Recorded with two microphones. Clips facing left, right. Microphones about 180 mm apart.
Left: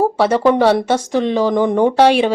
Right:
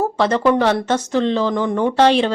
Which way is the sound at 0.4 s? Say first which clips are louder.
Left 4 dB; 15° left (ahead or behind).